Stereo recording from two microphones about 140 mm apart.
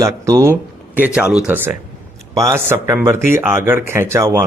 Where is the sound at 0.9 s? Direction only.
10° right (ahead or behind).